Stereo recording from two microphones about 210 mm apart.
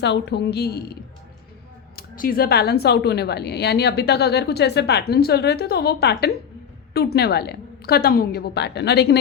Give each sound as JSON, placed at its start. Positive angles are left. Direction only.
{"t": 0.0, "sound": "speech", "side_deg": 55}
{"t": 2.0, "sound": "speech", "side_deg": 45}